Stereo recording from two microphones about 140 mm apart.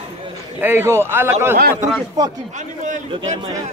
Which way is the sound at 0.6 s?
15° right (ahead or behind).